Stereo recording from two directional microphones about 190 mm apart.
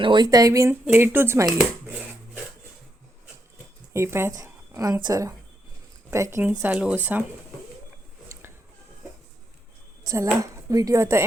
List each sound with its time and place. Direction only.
0.0 s speech: 25° right (ahead or behind)
3.9 s speech: 15° right (ahead or behind)
10.0 s speech: 15° right (ahead or behind)